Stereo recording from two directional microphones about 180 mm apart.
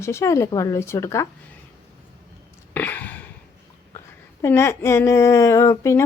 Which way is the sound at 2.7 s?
10° left (ahead or behind).